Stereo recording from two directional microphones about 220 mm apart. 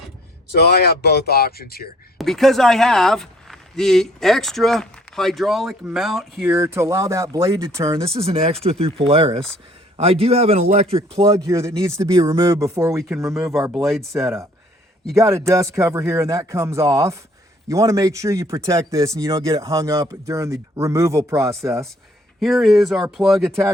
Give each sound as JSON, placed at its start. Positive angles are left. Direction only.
{"t": 0.5, "sound": "speech", "side_deg": 50}
{"t": 2.1, "sound": "speech", "side_deg": 0}
{"t": 6.5, "sound": "speech", "side_deg": -10}
{"t": 8.2, "sound": "speech", "side_deg": -25}
{"t": 11.4, "sound": "speech", "side_deg": -15}
{"t": 13.3, "sound": "speech", "side_deg": 0}
{"t": 15.1, "sound": "speech", "side_deg": -15}
{"t": 22.4, "sound": "speech", "side_deg": 0}